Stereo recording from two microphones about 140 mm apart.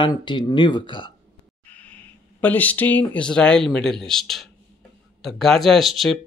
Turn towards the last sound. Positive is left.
turn(degrees=0)  # may be behind; listen again after turning